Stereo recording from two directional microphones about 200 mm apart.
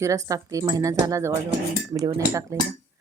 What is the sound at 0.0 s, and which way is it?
A woman's voice, 15° right (ahead or behind).